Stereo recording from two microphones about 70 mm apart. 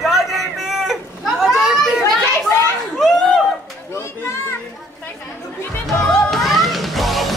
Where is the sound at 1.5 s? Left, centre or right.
Centre.